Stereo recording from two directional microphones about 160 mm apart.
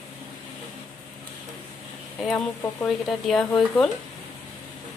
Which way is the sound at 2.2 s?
5° left (ahead or behind).